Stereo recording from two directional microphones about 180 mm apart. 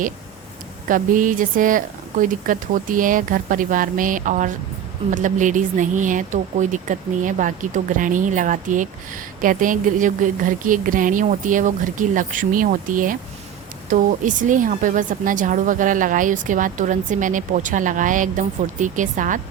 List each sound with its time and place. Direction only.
0.9 s speech: 50° right (ahead or behind)